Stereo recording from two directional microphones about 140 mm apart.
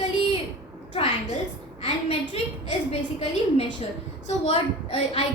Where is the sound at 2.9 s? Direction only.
45° left (ahead or behind).